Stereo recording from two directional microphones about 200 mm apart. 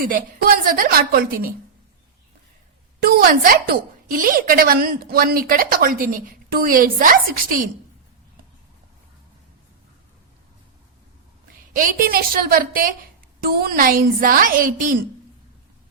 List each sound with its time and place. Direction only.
0.1 s a woman's voice: 45° right (ahead or behind)
3.0 s a woman's voice: 50° right (ahead or behind)
11.7 s a woman's voice: 45° right (ahead or behind)